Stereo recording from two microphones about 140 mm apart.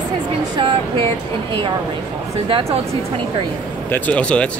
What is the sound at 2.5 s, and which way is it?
Speech, 45° right (ahead or behind).